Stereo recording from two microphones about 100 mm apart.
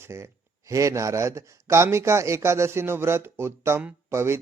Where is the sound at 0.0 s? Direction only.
30° right (ahead or behind).